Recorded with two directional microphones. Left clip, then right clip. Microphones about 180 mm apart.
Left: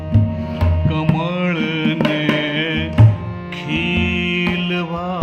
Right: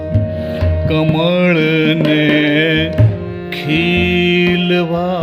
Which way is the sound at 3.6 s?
45° right (ahead or behind).